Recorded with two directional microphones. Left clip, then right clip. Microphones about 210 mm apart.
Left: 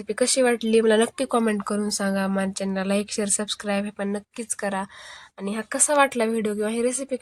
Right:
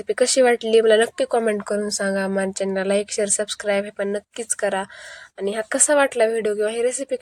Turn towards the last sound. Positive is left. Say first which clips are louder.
# right 3 dB
turn(degrees=-10)  # may be behind; listen again after turning